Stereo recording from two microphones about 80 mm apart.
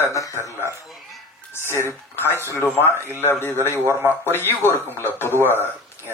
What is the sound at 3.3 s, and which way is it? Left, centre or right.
Speech, left.